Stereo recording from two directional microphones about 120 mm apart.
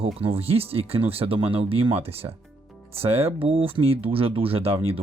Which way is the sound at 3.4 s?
50° right (ahead or behind).